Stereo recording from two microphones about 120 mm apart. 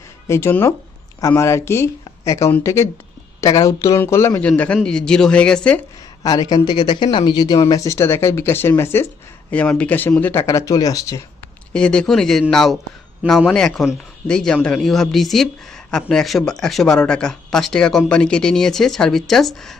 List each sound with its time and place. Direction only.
0.3 s speech: 20° left (ahead or behind)
4.4 s speech: 10° left (ahead or behind)
6.2 s speech: 35° left (ahead or behind)
9.5 s speech: 10° left (ahead or behind); by 11.2 s 30° left (ahead or behind)
11.7 s speech: 5° left (ahead or behind)